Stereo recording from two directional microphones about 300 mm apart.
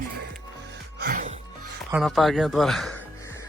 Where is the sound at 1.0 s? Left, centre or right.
Right.